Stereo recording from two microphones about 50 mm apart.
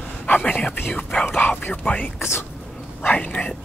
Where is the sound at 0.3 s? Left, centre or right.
Left.